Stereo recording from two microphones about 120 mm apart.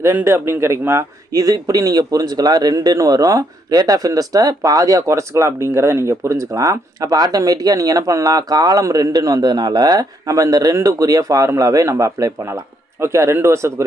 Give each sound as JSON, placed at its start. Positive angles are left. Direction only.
{"t": 0.0, "sound": "a man's voice", "side_deg": -20}